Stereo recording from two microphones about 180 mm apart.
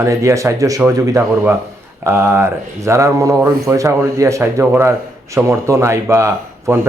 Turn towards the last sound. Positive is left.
turn(degrees=-15)  # may be behind; listen again after turning